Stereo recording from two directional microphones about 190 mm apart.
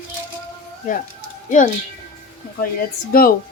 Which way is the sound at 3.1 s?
50° left (ahead or behind).